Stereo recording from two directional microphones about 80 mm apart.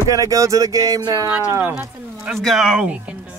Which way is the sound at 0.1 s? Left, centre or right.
Right.